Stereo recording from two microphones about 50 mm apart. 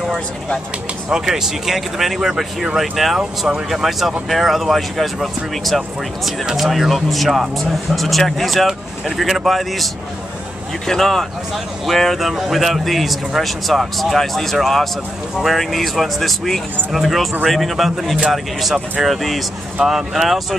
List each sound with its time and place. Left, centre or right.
1.1 s speech: centre
3.2 s speech: centre
3.7 s speech: centre
6.4 s speech: centre
6.7 s speech: centre
10.9 s speech: centre